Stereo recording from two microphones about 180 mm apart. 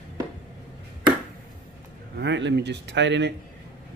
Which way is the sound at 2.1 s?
85° right.